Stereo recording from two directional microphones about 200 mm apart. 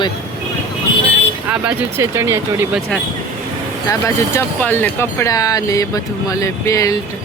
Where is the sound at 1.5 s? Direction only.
10° right (ahead or behind).